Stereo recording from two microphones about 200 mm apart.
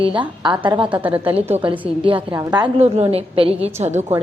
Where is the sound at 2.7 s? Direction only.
30° right (ahead or behind).